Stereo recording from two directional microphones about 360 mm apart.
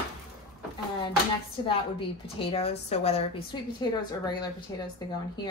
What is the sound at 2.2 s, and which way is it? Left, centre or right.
A woman's voice, centre.